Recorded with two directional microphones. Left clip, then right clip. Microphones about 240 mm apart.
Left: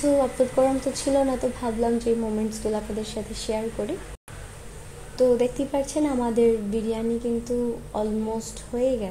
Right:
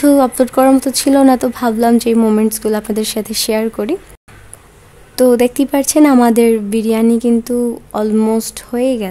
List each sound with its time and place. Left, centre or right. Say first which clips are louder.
0.2 s a woman's voice: right 10 dB; right
5.1 s a woman's voice: right 10 dB; right